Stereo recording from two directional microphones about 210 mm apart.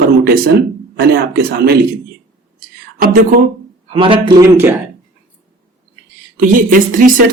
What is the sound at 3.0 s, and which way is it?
Speech, 40° right (ahead or behind).